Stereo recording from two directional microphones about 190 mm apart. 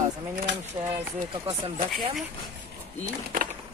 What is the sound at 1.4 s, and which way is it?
Speech, 30° right (ahead or behind).